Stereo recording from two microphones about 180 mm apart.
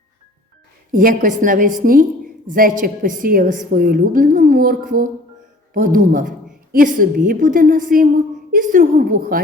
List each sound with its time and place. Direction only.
0.9 s a woman's voice: 50° right (ahead or behind)